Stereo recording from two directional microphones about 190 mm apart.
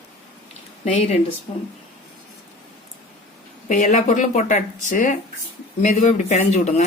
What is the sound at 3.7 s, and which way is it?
Speech, 40° left (ahead or behind).